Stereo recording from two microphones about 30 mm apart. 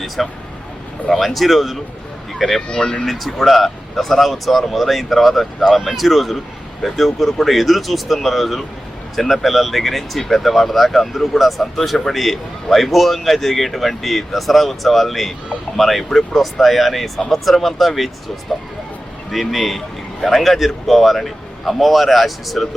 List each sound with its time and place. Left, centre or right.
0.2 s speech: centre
2.7 s speech: left
3.1 s speech: centre
19.3 s speech: centre